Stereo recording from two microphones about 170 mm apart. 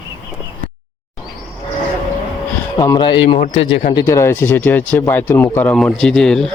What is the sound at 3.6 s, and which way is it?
Speech, 90° left.